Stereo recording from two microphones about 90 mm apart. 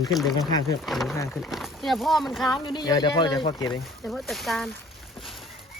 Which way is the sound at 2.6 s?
55° left (ahead or behind).